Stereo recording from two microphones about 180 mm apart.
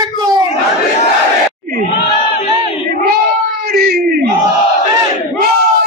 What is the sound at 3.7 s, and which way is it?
Yell, 55° right (ahead or behind).